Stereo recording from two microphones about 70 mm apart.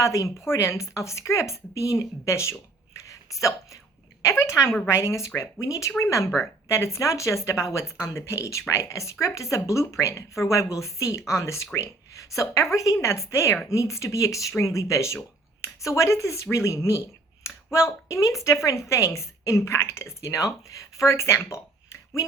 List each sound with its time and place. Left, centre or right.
0.0 s speech: left